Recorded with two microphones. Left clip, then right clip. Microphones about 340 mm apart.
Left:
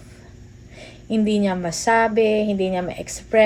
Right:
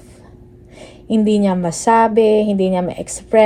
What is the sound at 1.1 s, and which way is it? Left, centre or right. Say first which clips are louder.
A woman's voice: right 5 dB; right.